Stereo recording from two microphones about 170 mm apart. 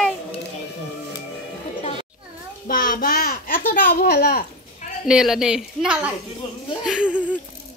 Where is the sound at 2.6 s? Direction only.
55° left (ahead or behind).